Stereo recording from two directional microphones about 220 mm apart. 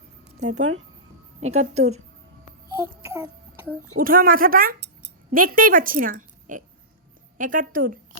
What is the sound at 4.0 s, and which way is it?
A woman's voice, 40° right (ahead or behind).